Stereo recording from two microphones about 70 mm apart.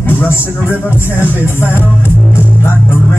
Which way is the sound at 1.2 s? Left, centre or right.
Left.